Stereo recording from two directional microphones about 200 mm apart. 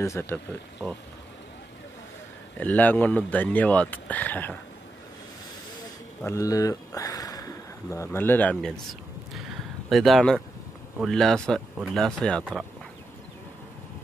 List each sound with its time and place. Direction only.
0.0 s speech: 15° left (ahead or behind)
2.5 s speech: 10° left (ahead or behind)
6.2 s speech: 15° left (ahead or behind)
9.8 s speech: centre (ahead or behind)